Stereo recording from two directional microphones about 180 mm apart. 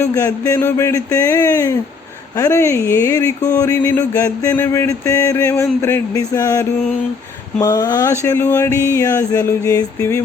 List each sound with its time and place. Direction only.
0.0 s speech: 20° left (ahead or behind)